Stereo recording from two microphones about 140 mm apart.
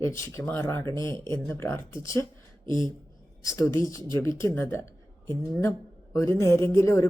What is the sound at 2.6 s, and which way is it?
Speech, 30° right (ahead or behind).